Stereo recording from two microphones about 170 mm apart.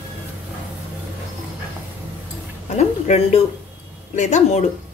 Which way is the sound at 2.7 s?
40° left (ahead or behind).